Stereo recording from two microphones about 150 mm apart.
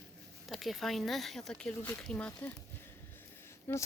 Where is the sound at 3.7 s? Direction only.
15° left (ahead or behind).